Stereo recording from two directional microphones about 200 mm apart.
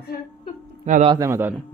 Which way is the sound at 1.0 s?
20° right (ahead or behind).